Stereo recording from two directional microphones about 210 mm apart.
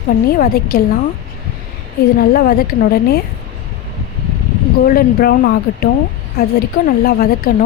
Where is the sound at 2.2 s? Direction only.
45° left (ahead or behind).